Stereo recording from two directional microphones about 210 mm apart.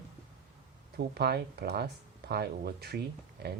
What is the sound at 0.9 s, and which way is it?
Speech, 50° right (ahead or behind).